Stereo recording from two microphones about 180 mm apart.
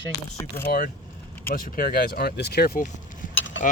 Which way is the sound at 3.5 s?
90° left.